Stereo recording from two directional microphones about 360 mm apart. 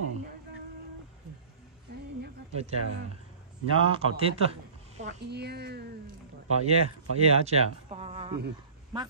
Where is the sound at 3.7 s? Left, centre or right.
Centre.